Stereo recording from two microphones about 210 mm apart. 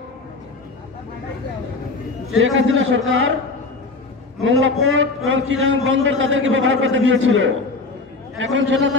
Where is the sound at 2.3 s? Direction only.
65° right (ahead or behind).